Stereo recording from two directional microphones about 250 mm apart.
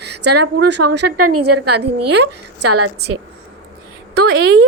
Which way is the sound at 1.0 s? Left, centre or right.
Right.